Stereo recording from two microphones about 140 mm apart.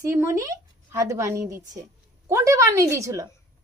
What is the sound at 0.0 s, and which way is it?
A woman's voice, 20° right (ahead or behind).